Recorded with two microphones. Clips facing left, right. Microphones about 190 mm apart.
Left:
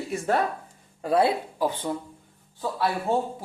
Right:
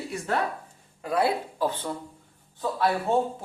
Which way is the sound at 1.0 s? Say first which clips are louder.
Left 3 dB; 30° left (ahead or behind).